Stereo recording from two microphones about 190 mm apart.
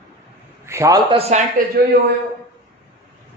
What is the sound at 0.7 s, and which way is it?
Speech, 15° right (ahead or behind).